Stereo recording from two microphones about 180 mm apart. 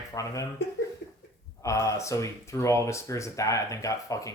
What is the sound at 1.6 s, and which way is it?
Speech, 15° left (ahead or behind).